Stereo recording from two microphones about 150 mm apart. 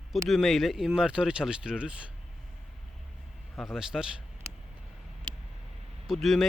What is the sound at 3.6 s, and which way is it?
Speech, centre (ahead or behind).